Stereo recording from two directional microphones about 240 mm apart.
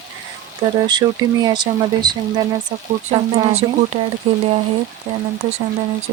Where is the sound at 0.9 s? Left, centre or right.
Centre.